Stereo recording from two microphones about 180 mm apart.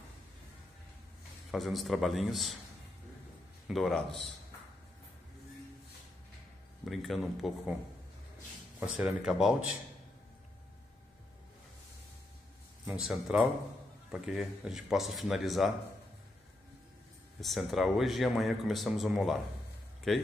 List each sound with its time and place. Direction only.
1.5 s speech: centre (ahead or behind)
3.6 s speech: centre (ahead or behind)
6.8 s speech: centre (ahead or behind)
8.7 s speech: 5° right (ahead or behind)
12.8 s speech: 5° right (ahead or behind)
17.4 s speech: centre (ahead or behind)